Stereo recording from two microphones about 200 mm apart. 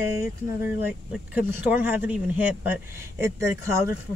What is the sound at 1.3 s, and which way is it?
Speech, 10° right (ahead or behind).